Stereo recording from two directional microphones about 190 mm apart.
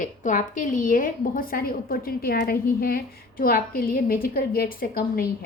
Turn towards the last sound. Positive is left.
turn(degrees=50)  # may be behind; listen again after turning